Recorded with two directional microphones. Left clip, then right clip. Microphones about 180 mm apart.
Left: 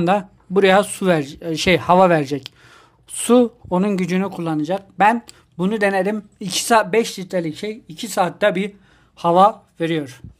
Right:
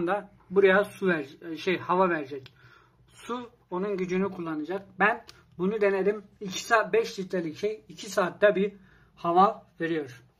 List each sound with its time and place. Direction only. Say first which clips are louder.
0.0 s speech: left 10 dB; 45° left (ahead or behind)